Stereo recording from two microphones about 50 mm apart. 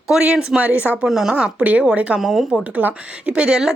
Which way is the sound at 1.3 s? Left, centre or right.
Right.